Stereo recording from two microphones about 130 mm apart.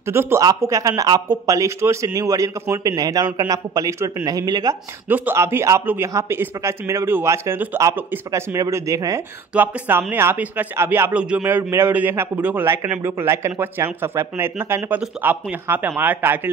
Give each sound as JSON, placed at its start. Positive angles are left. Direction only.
{"t": 0.1, "sound": "speech", "side_deg": -20}
{"t": 5.1, "sound": "a man's voice", "side_deg": -15}